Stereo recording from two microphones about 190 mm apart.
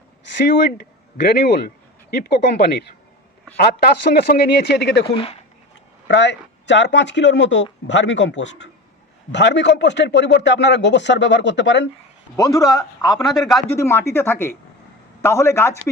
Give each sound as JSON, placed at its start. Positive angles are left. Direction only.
{"t": 0.4, "sound": "a man's voice", "side_deg": 55}
{"t": 5.0, "sound": "speech", "side_deg": 30}
{"t": 6.1, "sound": "speech", "side_deg": 70}
{"t": 12.4, "sound": "speech", "side_deg": 15}
{"t": 13.3, "sound": "speech", "side_deg": 0}
{"t": 13.7, "sound": "speech", "side_deg": 15}